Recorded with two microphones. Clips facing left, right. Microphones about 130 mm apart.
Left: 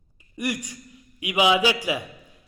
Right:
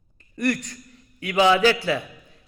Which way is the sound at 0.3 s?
10° left (ahead or behind).